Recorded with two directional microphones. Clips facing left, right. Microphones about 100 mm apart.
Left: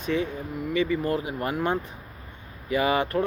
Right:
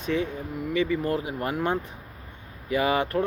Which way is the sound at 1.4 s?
10° left (ahead or behind).